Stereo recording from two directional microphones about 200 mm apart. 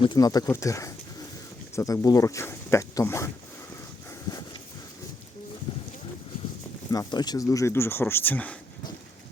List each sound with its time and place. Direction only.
0.0 s speech: 20° left (ahead or behind)
5.7 s a sound: 25° left (ahead or behind)
6.9 s speech: 20° left (ahead or behind)